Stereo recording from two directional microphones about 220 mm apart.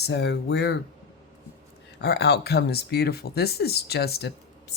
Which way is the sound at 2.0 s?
50° left (ahead or behind).